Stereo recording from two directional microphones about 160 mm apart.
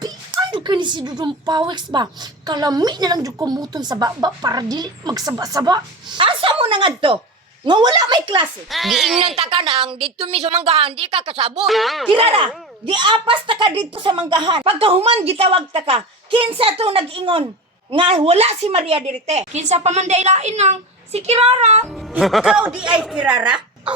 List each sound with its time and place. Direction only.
0.3 s a woman's voice: 30° right (ahead or behind)
8.7 s speech: centre (ahead or behind)
9.4 s speech: 35° right (ahead or behind)
11.5 s speech: centre (ahead or behind)
12.1 s a woman's voice: 35° right (ahead or behind)
22.1 s speech: centre (ahead or behind)